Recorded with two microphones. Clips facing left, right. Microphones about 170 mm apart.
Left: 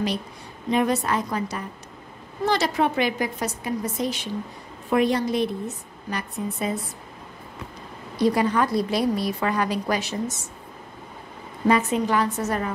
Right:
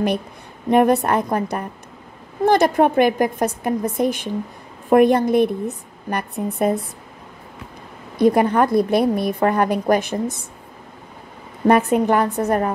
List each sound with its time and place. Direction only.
0.7 s a woman's voice: 55° right (ahead or behind)
8.2 s a woman's voice: 55° right (ahead or behind)
11.6 s a woman's voice: 55° right (ahead or behind)